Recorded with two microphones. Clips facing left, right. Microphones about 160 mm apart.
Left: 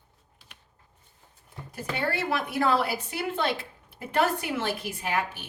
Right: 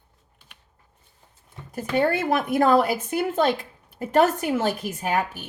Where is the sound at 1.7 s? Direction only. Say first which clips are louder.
Right 8 dB; 45° right (ahead or behind).